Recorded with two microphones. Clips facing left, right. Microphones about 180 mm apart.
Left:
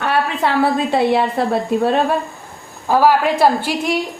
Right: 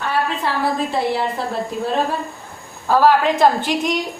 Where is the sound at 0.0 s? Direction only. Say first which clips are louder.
Left 3 dB; 65° left (ahead or behind).